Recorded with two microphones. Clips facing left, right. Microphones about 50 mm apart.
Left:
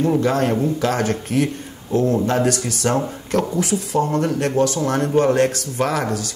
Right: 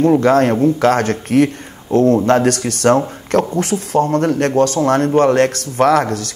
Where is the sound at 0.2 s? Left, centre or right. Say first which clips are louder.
Right 6 dB; right.